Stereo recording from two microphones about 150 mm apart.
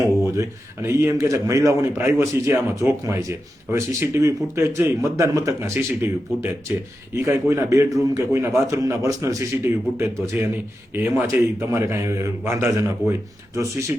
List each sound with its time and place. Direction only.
0.3 s a man's voice: 20° right (ahead or behind)